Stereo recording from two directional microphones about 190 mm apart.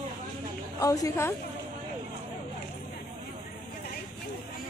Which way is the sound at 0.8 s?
20° left (ahead or behind).